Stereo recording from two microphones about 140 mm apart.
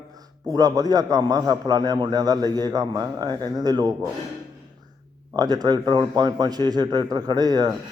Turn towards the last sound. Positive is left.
turn(degrees=-30)  # may be behind; listen again after turning